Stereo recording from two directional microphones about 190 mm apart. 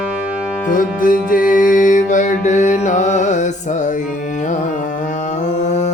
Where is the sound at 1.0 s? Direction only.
45° left (ahead or behind).